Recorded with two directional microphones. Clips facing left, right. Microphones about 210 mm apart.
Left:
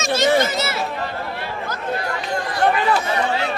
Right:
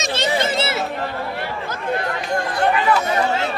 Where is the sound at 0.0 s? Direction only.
30° right (ahead or behind).